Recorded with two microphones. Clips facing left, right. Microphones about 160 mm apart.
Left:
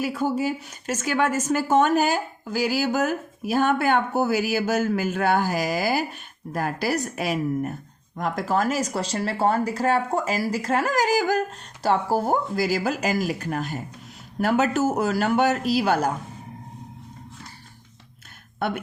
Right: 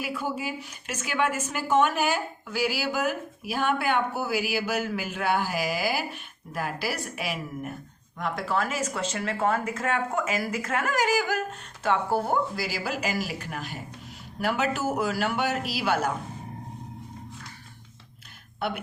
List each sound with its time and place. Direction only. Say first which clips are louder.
0.0 s a woman's voice: left 7 dB; 40° left (ahead or behind)